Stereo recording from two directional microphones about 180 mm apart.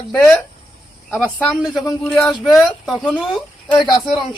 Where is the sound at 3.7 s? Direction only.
25° left (ahead or behind).